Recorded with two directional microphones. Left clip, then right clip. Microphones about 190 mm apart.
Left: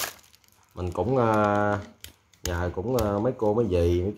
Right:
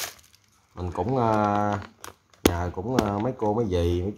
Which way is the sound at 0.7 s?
10° right (ahead or behind).